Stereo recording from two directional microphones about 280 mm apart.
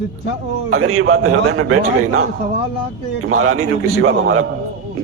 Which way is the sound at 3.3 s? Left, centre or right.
Right.